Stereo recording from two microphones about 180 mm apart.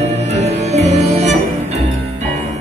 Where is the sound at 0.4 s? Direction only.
35° right (ahead or behind).